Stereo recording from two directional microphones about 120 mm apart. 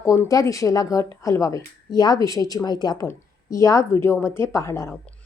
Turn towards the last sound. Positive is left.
turn(degrees=25)  # may be behind; listen again after turning